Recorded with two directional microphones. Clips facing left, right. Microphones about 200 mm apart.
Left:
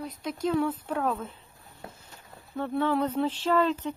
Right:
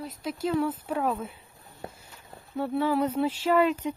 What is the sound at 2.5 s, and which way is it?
Speech, 10° right (ahead or behind).